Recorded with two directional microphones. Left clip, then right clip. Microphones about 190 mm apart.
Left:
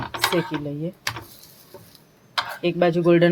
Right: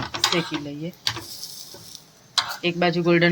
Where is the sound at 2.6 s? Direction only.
45° left (ahead or behind).